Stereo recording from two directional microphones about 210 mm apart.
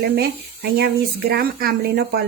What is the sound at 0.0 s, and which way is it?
Speech, 50° right (ahead or behind).